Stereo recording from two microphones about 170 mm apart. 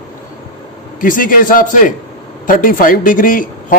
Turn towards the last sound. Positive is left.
turn(degrees=55)  # may be behind; listen again after turning